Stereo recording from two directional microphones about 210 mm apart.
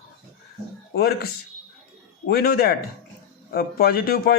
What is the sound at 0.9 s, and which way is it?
Speech, 50° left (ahead or behind).